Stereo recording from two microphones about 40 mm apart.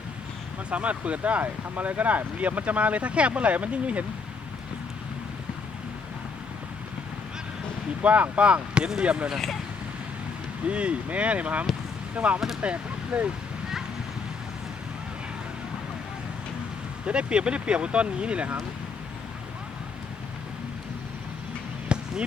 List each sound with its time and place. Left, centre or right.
0.7 s speech: right
8.0 s speech: right
10.7 s speech: right
17.1 s speech: right
21.9 s basketball bounce: right